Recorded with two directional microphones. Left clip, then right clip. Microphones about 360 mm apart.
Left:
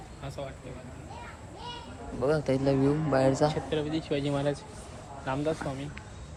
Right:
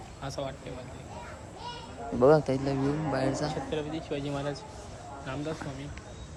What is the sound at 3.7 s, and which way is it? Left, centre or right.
Speech, left.